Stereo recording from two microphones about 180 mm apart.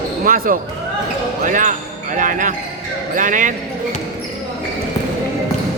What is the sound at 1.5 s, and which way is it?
Basketball bounce, 45° right (ahead or behind).